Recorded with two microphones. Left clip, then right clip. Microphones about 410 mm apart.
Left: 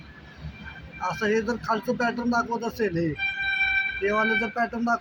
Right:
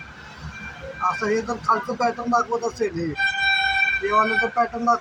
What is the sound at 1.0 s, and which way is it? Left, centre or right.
Speech, left.